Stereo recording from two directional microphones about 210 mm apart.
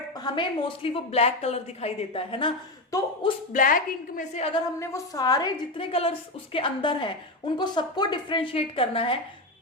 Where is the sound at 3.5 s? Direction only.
40° left (ahead or behind).